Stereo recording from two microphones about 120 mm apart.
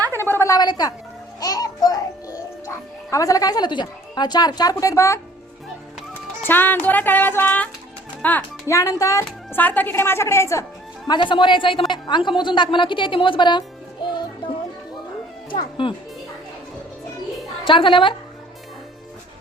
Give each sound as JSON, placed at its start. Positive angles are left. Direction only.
{"t": 0.1, "sound": "a sound", "side_deg": 20}
{"t": 0.5, "sound": "a woman's voice", "side_deg": 35}
{"t": 1.4, "sound": "music", "side_deg": 30}
{"t": 2.6, "sound": "a woman's voice", "side_deg": 25}
{"t": 6.4, "sound": "music", "side_deg": 15}
{"t": 8.7, "sound": "a woman's voice", "side_deg": 30}
{"t": 11.1, "sound": "a woman's voice", "side_deg": 45}
{"t": 14.1, "sound": "music", "side_deg": 40}
{"t": 15.5, "sound": "speech", "side_deg": 45}
{"t": 17.7, "sound": "speech", "side_deg": 45}